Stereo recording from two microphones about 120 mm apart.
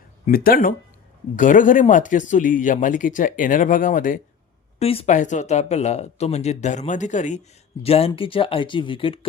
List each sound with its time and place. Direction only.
1.4 s speech: 90° left
4.8 s speech: 55° left (ahead or behind)
5.0 s speech: 90° left
7.8 s speech: 55° left (ahead or behind)